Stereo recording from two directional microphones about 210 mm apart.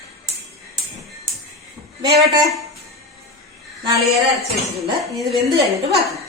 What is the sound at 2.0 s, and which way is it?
Speech, 50° right (ahead or behind).